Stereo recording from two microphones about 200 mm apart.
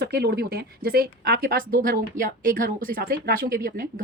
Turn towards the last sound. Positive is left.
turn(degrees=-45)  # may be behind; listen again after turning